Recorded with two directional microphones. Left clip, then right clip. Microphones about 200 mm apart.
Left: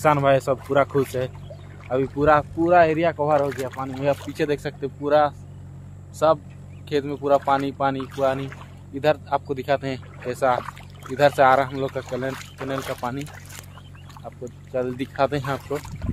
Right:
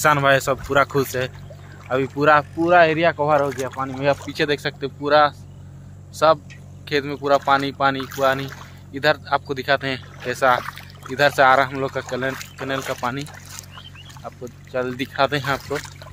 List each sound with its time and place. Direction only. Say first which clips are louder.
0.0 s speech: right 2 dB; centre (ahead or behind)
14.7 s speech: right 2 dB; centre (ahead or behind)